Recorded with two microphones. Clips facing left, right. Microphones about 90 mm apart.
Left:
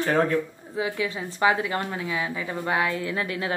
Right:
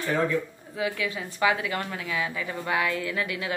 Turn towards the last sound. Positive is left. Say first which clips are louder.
# left 2 dB
turn(degrees=35)  # may be behind; listen again after turning